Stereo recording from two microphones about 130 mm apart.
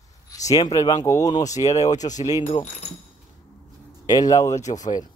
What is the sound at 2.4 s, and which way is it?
Speech, 60° left (ahead or behind).